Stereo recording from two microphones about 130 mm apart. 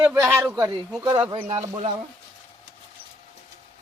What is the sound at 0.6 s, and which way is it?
Speech, 35° right (ahead or behind).